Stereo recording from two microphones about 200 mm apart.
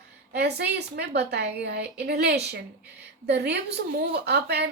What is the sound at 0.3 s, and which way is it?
A woman's voice, 55° right (ahead or behind).